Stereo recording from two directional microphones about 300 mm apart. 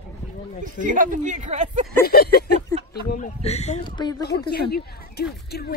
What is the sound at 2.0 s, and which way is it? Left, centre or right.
A woman's voice, left.